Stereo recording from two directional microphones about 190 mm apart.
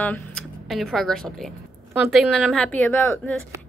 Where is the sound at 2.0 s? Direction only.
Centre (ahead or behind).